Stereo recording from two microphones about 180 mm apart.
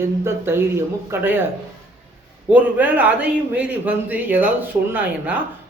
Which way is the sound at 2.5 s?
10° right (ahead or behind).